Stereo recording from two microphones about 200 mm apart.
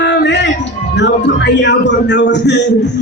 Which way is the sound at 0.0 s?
60° left (ahead or behind).